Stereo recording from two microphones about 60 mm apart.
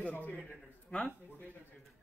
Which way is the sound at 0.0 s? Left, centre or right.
Left.